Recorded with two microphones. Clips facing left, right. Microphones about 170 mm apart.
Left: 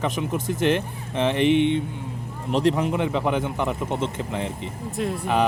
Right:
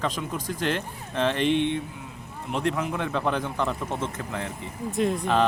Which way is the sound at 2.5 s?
30° left (ahead or behind).